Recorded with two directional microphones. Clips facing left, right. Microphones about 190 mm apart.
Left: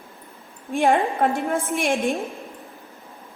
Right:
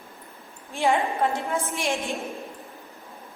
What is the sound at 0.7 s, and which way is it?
A woman's voice, 55° left (ahead or behind).